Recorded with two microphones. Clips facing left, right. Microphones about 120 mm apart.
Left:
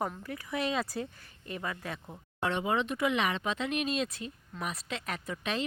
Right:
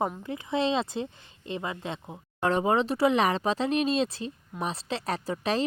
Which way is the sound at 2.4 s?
40° right (ahead or behind).